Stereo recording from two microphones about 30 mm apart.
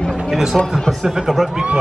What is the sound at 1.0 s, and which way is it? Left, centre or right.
Speech, centre.